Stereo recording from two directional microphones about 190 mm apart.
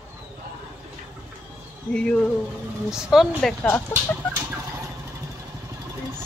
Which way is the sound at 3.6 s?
10° left (ahead or behind).